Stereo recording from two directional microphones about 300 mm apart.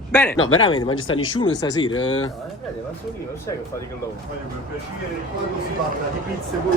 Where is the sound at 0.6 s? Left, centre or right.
Centre.